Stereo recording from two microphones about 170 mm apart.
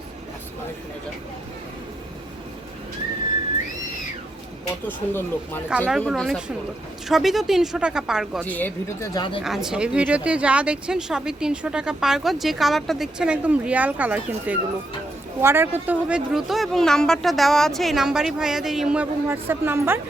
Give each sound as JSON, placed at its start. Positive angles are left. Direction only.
{"t": 4.9, "sound": "speech", "side_deg": 10}
{"t": 8.4, "sound": "speech", "side_deg": 10}
{"t": 9.1, "sound": "speech", "side_deg": 25}
{"t": 9.4, "sound": "speech", "side_deg": 0}